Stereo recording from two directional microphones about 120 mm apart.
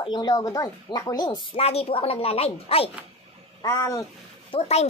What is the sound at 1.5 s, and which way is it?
Speech, 60° left (ahead or behind).